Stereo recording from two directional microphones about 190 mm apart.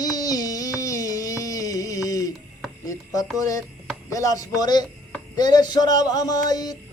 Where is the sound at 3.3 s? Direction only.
20° left (ahead or behind).